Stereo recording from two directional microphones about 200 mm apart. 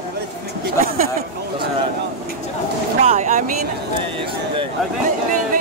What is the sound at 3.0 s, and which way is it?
Vehicle, 35° right (ahead or behind).